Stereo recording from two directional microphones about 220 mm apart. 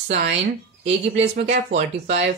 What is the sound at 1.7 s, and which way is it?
Speech, 30° right (ahead or behind).